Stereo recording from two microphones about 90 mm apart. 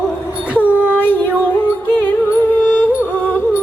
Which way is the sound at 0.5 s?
15° right (ahead or behind).